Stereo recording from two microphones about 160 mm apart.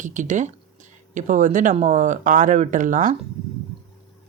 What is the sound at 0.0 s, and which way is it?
Speech, 50° right (ahead or behind).